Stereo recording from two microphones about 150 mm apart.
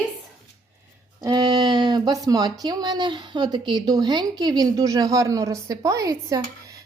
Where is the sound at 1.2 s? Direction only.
30° right (ahead or behind).